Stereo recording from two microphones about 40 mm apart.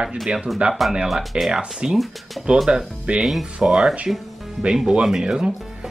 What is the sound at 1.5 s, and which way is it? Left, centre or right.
Speech, right.